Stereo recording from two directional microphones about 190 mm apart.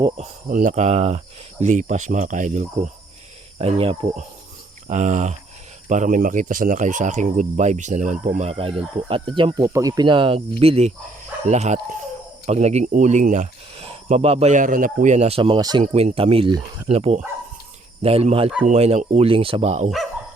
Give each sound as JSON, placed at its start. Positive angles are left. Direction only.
{"t": 0.2, "sound": "speech", "side_deg": -45}
{"t": 3.6, "sound": "speech", "side_deg": -30}
{"t": 4.9, "sound": "speech", "side_deg": -40}
{"t": 15.8, "sound": "speech", "side_deg": -35}